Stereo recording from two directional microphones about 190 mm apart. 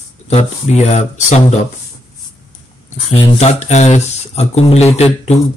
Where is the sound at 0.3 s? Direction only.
35° left (ahead or behind).